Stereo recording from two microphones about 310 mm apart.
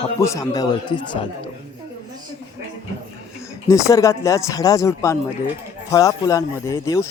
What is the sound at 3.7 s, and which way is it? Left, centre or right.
A man's voice, centre.